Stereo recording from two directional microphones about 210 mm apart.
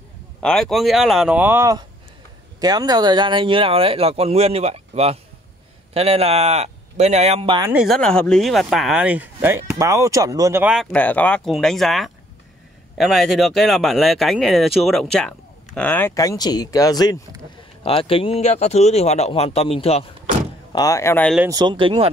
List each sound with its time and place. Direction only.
0.4 s speech: 5° left (ahead or behind); by 7.7 s 25° right (ahead or behind)
7.7 s speech: centre (ahead or behind); by 20.1 s 25° left (ahead or behind)
20.7 s speech: 15° left (ahead or behind)
21.5 s speech: 20° right (ahead or behind)